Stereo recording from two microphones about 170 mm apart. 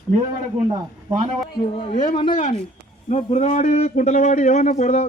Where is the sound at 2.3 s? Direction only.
50° left (ahead or behind).